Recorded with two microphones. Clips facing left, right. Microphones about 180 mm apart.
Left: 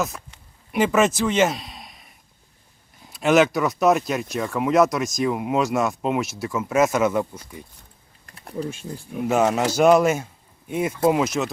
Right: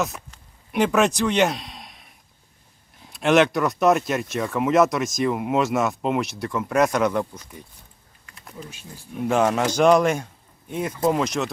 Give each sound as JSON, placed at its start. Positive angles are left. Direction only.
{"t": 0.7, "sound": "a man's voice", "side_deg": 0}
{"t": 8.3, "sound": "typing", "side_deg": 40}
{"t": 9.2, "sound": "speech", "side_deg": 5}